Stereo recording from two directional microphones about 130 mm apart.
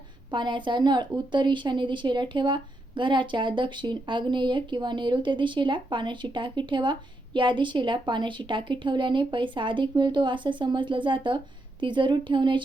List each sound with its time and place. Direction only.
0.3 s a woman's voice: 35° right (ahead or behind)